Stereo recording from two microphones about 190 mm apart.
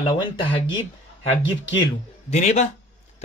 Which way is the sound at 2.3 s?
35° left (ahead or behind).